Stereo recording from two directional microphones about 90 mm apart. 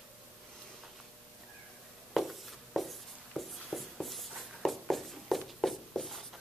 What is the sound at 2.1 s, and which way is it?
Writing, centre (ahead or behind).